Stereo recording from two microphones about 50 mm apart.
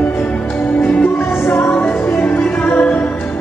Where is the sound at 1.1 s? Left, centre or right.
Left.